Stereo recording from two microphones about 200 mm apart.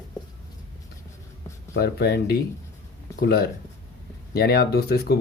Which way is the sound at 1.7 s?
50° left (ahead or behind).